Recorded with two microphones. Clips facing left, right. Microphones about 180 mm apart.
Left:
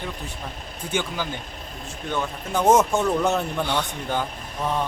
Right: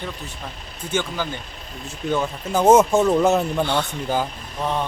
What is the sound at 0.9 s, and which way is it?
Speech, 15° left (ahead or behind).